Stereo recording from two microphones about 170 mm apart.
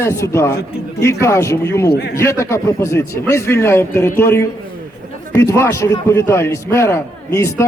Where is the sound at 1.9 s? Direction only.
70° left (ahead or behind).